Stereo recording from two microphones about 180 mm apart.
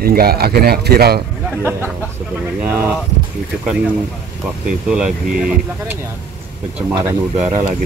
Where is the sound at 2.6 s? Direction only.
10° right (ahead or behind).